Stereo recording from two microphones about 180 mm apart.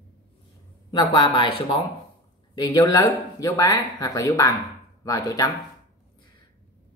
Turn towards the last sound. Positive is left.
turn(degrees=20)  # may be behind; listen again after turning